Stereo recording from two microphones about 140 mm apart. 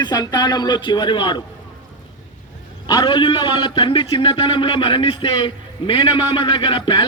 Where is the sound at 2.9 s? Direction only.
35° left (ahead or behind).